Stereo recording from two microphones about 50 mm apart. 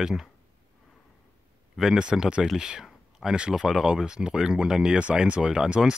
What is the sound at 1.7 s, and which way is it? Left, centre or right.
Speech, centre.